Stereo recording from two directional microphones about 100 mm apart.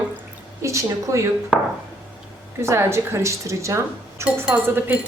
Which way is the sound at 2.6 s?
25° right (ahead or behind).